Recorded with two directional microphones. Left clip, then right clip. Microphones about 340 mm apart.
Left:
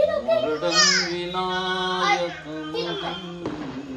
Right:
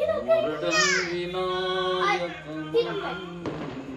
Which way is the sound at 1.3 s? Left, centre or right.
Left.